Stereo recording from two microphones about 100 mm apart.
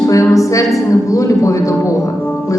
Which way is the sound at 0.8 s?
30° left (ahead or behind).